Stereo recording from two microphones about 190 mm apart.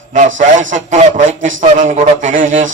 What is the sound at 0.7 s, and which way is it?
A man's voice, 40° right (ahead or behind).